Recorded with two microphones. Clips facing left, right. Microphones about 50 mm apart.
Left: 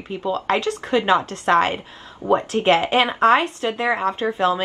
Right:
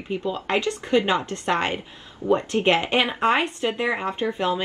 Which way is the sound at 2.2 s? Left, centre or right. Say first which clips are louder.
Left 2 dB; left.